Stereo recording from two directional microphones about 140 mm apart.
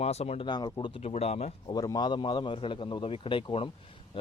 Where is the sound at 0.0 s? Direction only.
50° left (ahead or behind).